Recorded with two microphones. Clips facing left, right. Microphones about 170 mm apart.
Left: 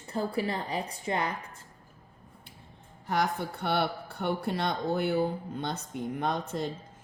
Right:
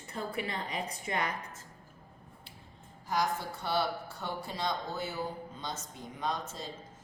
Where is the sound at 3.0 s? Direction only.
60° left (ahead or behind).